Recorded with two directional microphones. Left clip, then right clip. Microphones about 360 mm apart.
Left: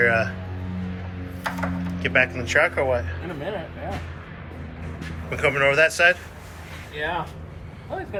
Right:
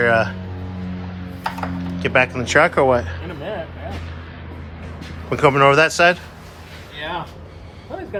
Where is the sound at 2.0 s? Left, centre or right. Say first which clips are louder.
Right 4 dB; centre.